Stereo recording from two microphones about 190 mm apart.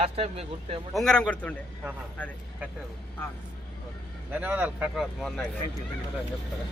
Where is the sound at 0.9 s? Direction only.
5° left (ahead or behind).